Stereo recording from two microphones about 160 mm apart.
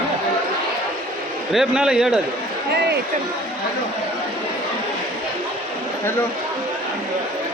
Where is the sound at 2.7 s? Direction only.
90° right.